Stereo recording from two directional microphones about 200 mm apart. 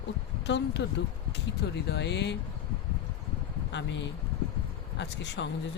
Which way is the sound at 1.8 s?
60° left (ahead or behind).